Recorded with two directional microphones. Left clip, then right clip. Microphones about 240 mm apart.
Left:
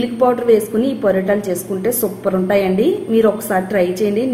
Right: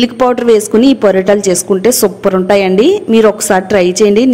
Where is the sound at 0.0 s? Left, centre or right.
Right.